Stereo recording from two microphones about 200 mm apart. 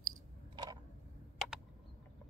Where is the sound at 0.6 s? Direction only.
25° right (ahead or behind).